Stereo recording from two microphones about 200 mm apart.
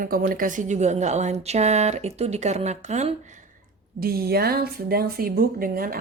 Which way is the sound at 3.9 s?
50° right (ahead or behind).